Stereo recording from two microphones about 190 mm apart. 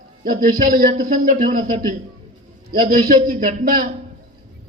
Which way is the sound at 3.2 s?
50° right (ahead or behind).